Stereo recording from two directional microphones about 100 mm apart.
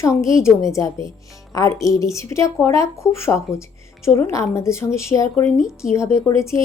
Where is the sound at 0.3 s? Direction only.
30° left (ahead or behind).